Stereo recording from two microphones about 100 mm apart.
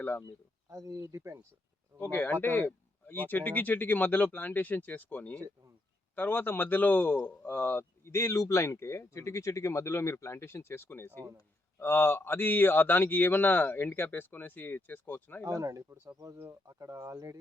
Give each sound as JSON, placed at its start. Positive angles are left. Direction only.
{"t": 0.7, "sound": "speech", "side_deg": -30}
{"t": 2.0, "sound": "a man's voice", "side_deg": 20}
{"t": 15.4, "sound": "speech", "side_deg": -35}